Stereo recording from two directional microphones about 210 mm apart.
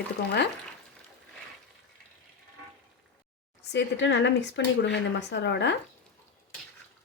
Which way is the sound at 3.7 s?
55° left (ahead or behind).